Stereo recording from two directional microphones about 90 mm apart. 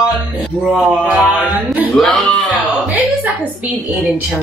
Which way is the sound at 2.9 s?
15° right (ahead or behind).